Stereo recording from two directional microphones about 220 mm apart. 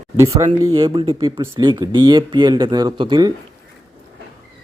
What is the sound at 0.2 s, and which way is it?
A man's voice, 15° right (ahead or behind).